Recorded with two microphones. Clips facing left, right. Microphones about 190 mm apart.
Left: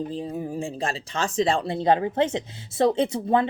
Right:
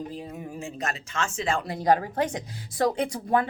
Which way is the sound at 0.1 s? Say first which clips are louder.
Left 7 dB; 30° left (ahead or behind).